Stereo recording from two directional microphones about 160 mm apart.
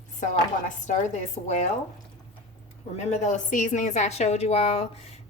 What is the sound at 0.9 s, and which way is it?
Speech, 50° left (ahead or behind).